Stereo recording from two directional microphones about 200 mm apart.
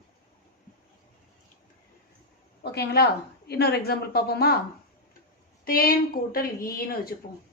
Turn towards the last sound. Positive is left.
turn(degrees=50)  # may be behind; listen again after turning